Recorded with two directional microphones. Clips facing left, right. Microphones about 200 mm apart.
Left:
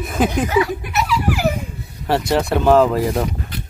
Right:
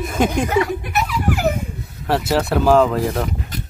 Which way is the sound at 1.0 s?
45° right (ahead or behind).